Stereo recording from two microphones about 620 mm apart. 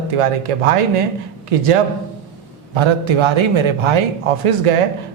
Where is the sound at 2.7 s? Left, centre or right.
Right.